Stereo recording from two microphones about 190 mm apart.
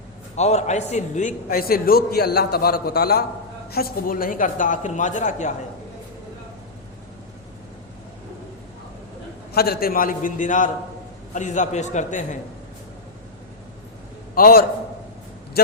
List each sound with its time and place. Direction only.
0.3 s a man's voice: 35° left (ahead or behind)
9.5 s a man's voice: 55° left (ahead or behind)
14.3 s a man's voice: 50° left (ahead or behind)